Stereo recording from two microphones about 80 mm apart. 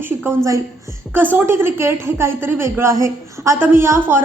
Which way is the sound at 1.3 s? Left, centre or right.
Right.